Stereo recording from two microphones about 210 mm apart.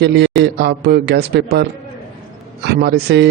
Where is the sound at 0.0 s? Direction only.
55° right (ahead or behind).